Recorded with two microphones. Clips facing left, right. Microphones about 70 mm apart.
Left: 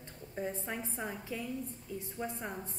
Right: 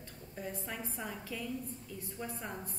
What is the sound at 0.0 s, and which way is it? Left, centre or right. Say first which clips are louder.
A woman's voice: left 5 dB; left.